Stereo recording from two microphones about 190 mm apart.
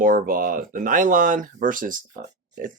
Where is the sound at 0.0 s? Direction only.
45° right (ahead or behind).